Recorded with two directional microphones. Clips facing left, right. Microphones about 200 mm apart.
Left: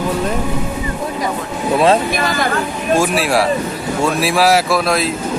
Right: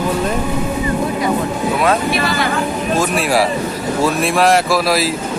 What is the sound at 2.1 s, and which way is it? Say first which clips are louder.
Speech: even; 45° left (ahead or behind).